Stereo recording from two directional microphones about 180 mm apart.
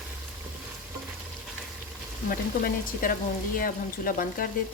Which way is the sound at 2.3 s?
50° left (ahead or behind).